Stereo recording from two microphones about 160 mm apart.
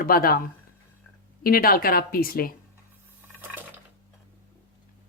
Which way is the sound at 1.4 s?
65° left (ahead or behind).